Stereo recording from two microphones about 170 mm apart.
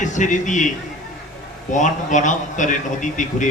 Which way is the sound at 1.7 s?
45° left (ahead or behind).